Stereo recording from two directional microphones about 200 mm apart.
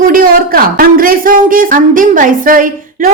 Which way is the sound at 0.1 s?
45° right (ahead or behind).